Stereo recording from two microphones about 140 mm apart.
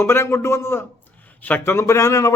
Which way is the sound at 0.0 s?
20° left (ahead or behind).